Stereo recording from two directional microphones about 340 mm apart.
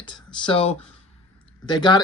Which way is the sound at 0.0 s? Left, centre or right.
Centre.